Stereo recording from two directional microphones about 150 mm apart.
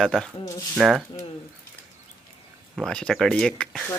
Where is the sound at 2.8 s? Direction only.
5° left (ahead or behind).